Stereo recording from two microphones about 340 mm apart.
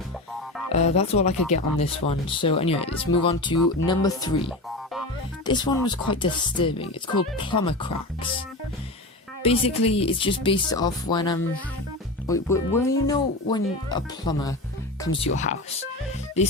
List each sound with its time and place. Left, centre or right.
0.7 s speech: centre
5.5 s speech: centre
9.4 s speech: centre